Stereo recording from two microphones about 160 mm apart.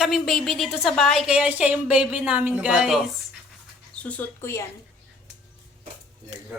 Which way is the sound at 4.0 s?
10° left (ahead or behind).